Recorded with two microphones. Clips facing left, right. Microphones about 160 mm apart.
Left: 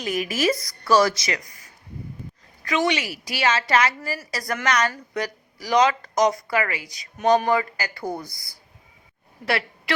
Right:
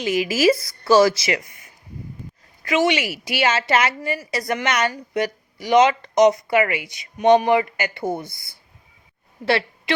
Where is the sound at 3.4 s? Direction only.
25° right (ahead or behind).